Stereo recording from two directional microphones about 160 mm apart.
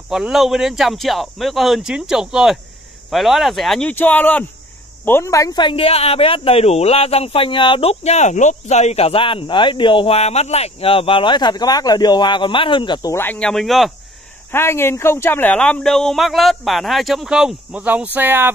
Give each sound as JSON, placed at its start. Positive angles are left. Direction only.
{"t": 0.1, "sound": "speech", "side_deg": 0}
{"t": 13.1, "sound": "speech", "side_deg": 10}
{"t": 14.5, "sound": "speech", "side_deg": 15}